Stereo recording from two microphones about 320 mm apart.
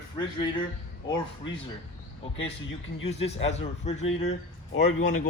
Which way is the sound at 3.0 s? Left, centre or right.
Centre.